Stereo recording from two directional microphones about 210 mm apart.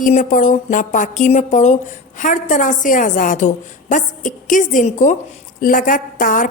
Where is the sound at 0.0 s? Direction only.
40° left (ahead or behind).